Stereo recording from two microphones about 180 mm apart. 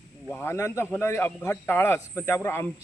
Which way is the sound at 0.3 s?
10° left (ahead or behind).